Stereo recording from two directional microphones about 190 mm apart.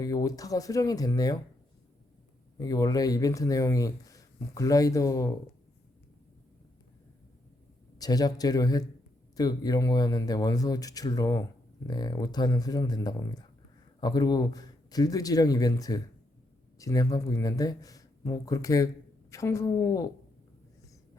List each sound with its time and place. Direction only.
0.0 s speech: 20° left (ahead or behind)
2.6 s speech: 20° left (ahead or behind)
7.9 s speech: 20° left (ahead or behind)